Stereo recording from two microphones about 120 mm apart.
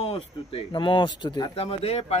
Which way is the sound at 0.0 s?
50° left (ahead or behind).